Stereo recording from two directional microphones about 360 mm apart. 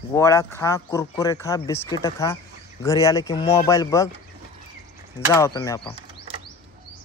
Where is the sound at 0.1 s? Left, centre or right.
Centre.